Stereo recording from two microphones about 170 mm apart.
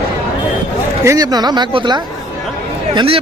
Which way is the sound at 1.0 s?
20° right (ahead or behind).